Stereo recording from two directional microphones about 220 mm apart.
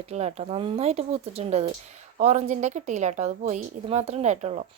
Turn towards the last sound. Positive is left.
turn(degrees=-30)  # may be behind; listen again after turning